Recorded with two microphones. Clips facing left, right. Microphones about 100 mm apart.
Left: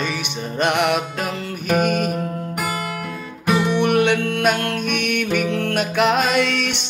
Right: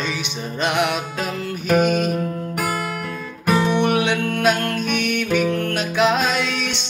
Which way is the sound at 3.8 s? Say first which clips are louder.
Left 2 dB; 60° left (ahead or behind).